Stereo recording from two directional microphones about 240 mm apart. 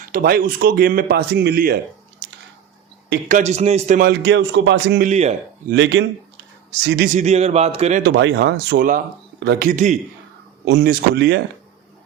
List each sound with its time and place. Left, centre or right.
0.1 s a man's voice: right
3.1 s a man's voice: right
5.0 s speech: right
5.7 s speech: right
8.0 s a man's voice: right
10.7 s speech: right